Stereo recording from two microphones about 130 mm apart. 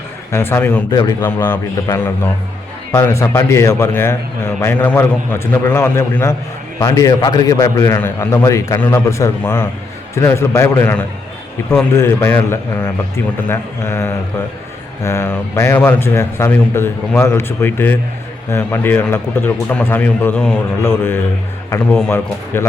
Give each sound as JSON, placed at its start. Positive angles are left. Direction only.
{"t": 0.3, "sound": "a man's voice", "side_deg": 20}
{"t": 0.9, "sound": "a man's voice", "side_deg": 30}
{"t": 1.2, "sound": "a man's voice", "side_deg": 15}
{"t": 2.9, "sound": "a man's voice", "side_deg": 20}
{"t": 20.8, "sound": "a man's voice", "side_deg": 20}
{"t": 21.8, "sound": "speech", "side_deg": 5}
{"t": 22.5, "sound": "a man's voice", "side_deg": 20}